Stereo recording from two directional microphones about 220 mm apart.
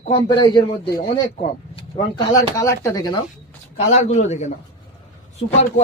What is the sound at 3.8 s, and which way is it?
Speech, 30° left (ahead or behind).